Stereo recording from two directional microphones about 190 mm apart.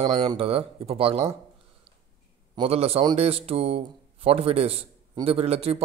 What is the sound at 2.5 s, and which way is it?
A man's voice, 30° right (ahead or behind).